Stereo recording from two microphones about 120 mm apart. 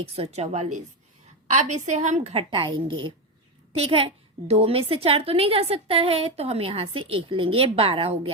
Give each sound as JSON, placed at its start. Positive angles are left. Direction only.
{"t": 0.0, "sound": "a woman's voice", "side_deg": -60}
{"t": 1.5, "sound": "a woman's voice", "side_deg": -90}
{"t": 2.4, "sound": "a woman's voice", "side_deg": -45}